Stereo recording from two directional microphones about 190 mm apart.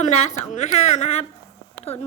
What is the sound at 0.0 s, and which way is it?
A woman's voice, 35° left (ahead or behind).